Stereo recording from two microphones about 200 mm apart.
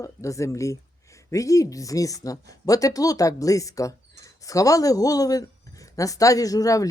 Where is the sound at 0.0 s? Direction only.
15° left (ahead or behind).